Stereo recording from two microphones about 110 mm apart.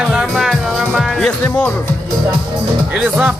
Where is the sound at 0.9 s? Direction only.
5° left (ahead or behind).